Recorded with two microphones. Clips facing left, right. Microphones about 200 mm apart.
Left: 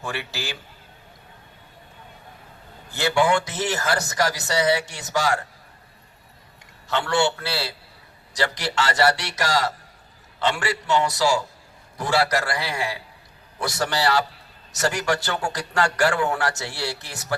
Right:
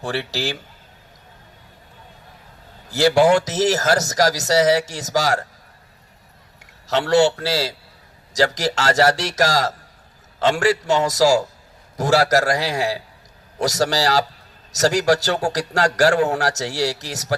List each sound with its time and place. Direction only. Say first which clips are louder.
0.0 s speech: right 7 dB; 35° right (ahead or behind)
2.9 s speech: right 6 dB; 40° right (ahead or behind)
6.8 s a man's voice: right 6 dB; 40° right (ahead or behind)